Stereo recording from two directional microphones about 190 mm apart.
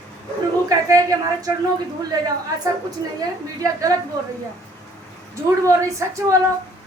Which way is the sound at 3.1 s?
15° right (ahead or behind).